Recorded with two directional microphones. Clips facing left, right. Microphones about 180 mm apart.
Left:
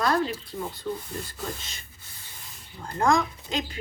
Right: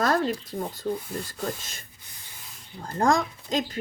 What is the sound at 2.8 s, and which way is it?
Speech, 35° right (ahead or behind).